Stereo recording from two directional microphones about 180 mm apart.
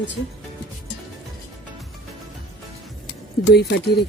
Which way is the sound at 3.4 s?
70° left (ahead or behind).